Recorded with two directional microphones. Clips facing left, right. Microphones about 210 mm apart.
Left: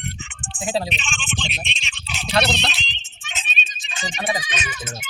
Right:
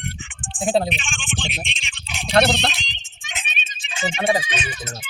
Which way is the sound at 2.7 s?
15° right (ahead or behind).